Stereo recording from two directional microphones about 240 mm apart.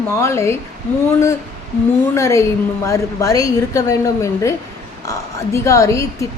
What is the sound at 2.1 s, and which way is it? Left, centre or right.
A woman's voice, centre.